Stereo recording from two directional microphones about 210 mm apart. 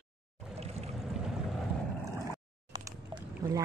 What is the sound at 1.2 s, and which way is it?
Boat, centre (ahead or behind).